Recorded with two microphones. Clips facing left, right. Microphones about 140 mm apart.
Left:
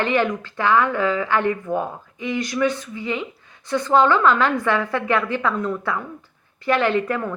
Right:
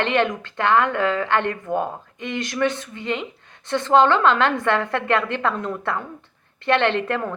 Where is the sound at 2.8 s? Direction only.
65° right (ahead or behind).